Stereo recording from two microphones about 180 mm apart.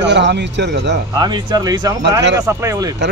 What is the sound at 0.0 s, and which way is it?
Speech, 75° right (ahead or behind).